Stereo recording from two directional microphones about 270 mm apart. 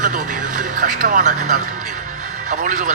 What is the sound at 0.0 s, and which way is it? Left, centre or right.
Music, right.